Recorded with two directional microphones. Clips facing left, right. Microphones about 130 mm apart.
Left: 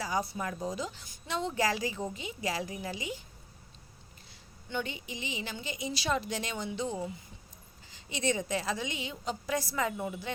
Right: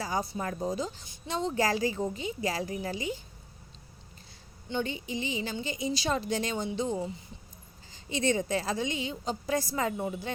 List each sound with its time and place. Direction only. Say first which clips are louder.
0.0 s a woman's voice: right 1 dB; 30° right (ahead or behind)
4.7 s a woman's voice: right 4 dB; 30° right (ahead or behind)